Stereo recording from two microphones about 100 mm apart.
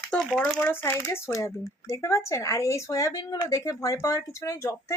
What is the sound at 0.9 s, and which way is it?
Speech, 25° left (ahead or behind).